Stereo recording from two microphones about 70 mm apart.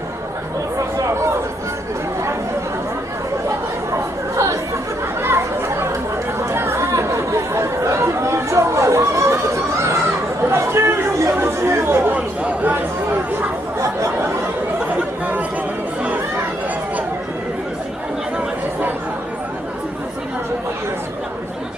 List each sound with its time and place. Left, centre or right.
0.8 s a sound: right
3.9 s chatter: right
5.2 s chatter: right
12.1 s chatter: right
18.3 s chatter: right